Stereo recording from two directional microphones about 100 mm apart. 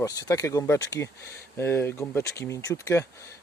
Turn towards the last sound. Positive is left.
turn(degrees=30)  # may be behind; listen again after turning